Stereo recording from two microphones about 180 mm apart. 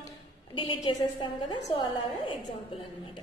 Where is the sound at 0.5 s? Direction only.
25° left (ahead or behind).